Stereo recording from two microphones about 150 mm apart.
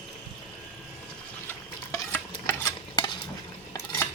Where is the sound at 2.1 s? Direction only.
15° left (ahead or behind).